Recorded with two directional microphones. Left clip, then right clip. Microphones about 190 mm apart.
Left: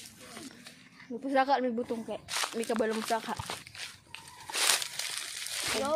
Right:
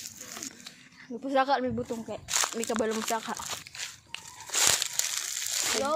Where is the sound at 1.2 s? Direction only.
10° right (ahead or behind).